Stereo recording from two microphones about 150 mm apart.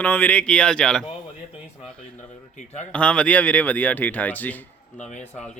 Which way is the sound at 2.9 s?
5° left (ahead or behind).